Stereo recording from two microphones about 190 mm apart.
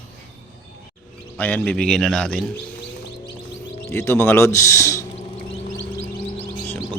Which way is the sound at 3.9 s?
15° left (ahead or behind).